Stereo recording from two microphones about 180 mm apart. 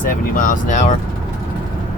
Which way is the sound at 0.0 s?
45° left (ahead or behind).